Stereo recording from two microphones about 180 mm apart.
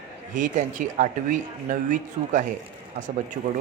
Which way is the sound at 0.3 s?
45° right (ahead or behind).